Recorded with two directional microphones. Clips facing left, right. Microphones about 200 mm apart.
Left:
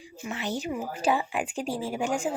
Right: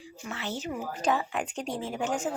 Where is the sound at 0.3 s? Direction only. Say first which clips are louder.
Left 3 dB; 15° left (ahead or behind).